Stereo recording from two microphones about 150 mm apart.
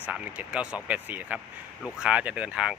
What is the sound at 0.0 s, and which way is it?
Speech, 10° right (ahead or behind).